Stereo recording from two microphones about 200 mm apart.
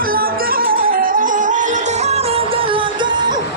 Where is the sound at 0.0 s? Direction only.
45° right (ahead or behind).